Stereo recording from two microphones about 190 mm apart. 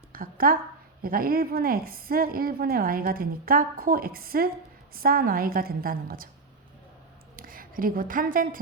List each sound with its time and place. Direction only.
0.1 s a sound: 50° right (ahead or behind)
1.0 s speech: 50° right (ahead or behind)
7.3 s speech: 50° right (ahead or behind)